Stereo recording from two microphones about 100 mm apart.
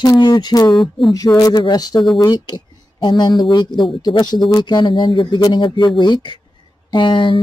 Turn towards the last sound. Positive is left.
turn(degrees=55)  # may be behind; listen again after turning